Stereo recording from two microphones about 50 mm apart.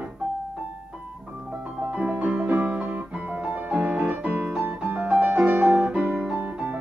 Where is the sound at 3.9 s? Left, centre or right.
Right.